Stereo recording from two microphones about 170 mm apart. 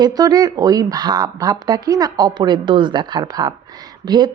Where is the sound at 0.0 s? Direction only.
20° right (ahead or behind).